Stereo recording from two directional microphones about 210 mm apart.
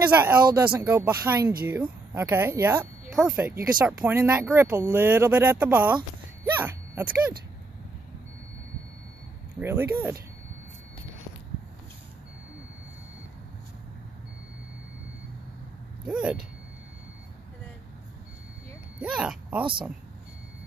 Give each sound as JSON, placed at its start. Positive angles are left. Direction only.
{"t": 0.0, "sound": "speech", "side_deg": -10}
{"t": 9.6, "sound": "speech", "side_deg": -10}
{"t": 16.1, "sound": "speech", "side_deg": -5}
{"t": 18.9, "sound": "speech", "side_deg": -5}
{"t": 19.6, "sound": "speech", "side_deg": -25}